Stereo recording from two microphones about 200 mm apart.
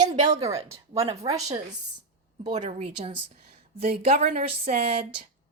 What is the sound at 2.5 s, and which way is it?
Speech, 35° right (ahead or behind).